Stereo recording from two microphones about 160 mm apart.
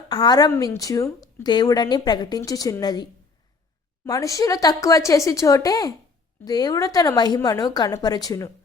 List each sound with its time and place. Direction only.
0.1 s a woman's voice: 25° left (ahead or behind)